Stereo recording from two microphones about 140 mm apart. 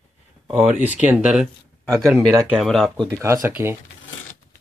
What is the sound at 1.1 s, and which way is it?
Speech, 5° right (ahead or behind).